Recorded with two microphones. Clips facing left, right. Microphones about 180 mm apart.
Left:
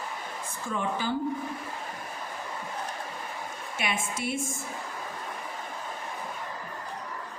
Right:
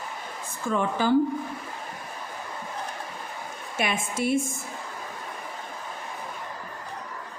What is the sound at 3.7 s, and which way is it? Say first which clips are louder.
Speech: right 5 dB; 45° right (ahead or behind).